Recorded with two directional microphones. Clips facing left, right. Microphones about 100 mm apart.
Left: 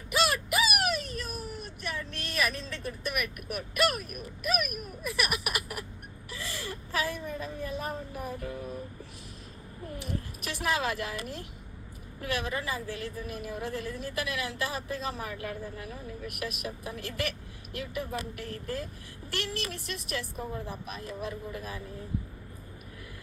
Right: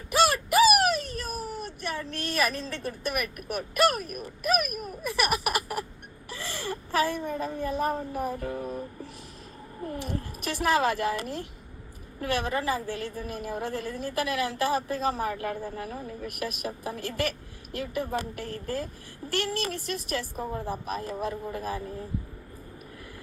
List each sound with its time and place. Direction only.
0.1 s wail: 40° right (ahead or behind)
1.8 s a woman's voice: 40° right (ahead or behind)
6.3 s a sound: 40° right (ahead or behind)
7.3 s a woman's voice: 45° right (ahead or behind)
9.9 s a woman's voice: 40° right (ahead or behind)